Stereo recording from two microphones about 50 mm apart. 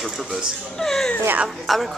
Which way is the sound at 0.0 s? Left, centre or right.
Centre.